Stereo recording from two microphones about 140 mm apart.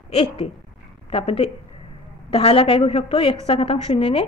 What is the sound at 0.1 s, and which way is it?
A woman's voice, 40° left (ahead or behind).